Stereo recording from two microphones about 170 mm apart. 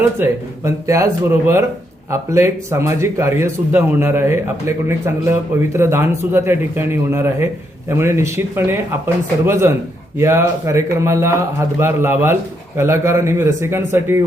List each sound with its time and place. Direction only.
0.0 s speech: 15° right (ahead or behind)